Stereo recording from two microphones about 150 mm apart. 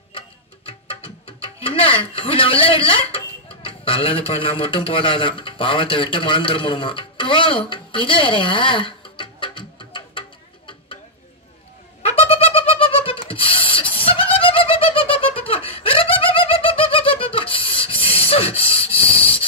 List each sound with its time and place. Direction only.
0.7 s music: 40° left (ahead or behind)
3.6 s a man's voice: 40° left (ahead or behind)
12.0 s a sound: 40° left (ahead or behind)
14.3 s laughter: 40° left (ahead or behind)